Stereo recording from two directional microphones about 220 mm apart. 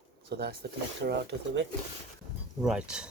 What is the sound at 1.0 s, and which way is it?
Speech, 50° right (ahead or behind).